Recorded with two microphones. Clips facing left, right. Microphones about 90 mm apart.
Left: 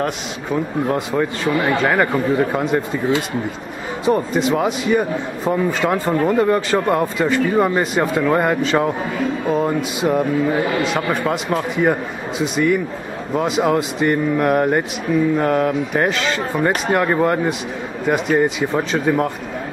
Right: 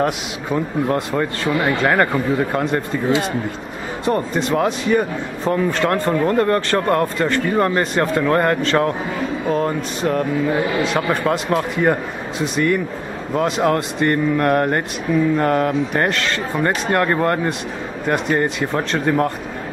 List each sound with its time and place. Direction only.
0.0 s speech: centre (ahead or behind)
4.0 s speech: 5° left (ahead or behind)